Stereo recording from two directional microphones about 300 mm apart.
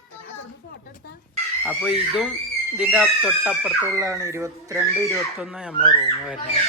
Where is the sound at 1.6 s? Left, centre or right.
Centre.